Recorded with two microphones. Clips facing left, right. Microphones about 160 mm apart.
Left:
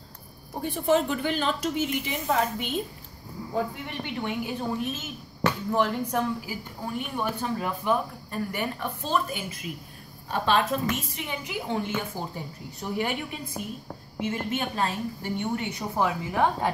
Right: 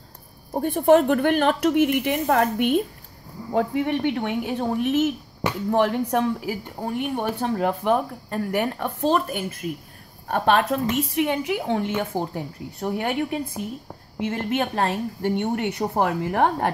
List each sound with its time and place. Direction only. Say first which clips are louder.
0.5 s a woman's voice: right 7 dB; 50° right (ahead or behind)
14.5 s speech: right 5 dB; 65° right (ahead or behind)